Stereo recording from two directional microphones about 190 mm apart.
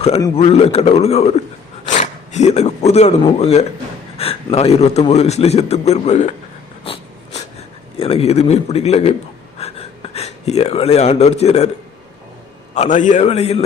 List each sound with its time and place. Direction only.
0.3 s a man's voice: 30° left (ahead or behind)
4.2 s gasp: 30° left (ahead or behind)
4.5 s a man's voice: 35° left (ahead or behind)
6.8 s snort: 30° left (ahead or behind)
7.9 s a man's voice: 30° left (ahead or behind)
9.6 s a sound: 30° left (ahead or behind)
12.7 s a man's voice: 40° left (ahead or behind)